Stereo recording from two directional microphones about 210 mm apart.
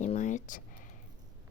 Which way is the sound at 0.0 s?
35° left (ahead or behind).